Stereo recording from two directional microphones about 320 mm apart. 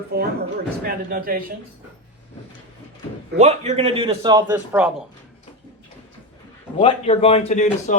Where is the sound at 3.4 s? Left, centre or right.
Centre.